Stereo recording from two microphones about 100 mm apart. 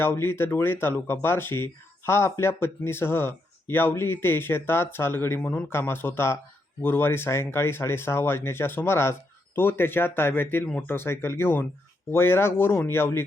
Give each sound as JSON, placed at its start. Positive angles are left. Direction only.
{"t": 0.0, "sound": "speech", "side_deg": 25}